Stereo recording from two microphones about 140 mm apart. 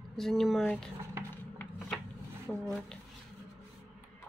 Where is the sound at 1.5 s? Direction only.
15° left (ahead or behind).